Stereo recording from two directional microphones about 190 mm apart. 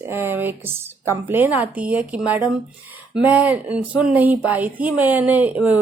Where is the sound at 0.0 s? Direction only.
10° right (ahead or behind).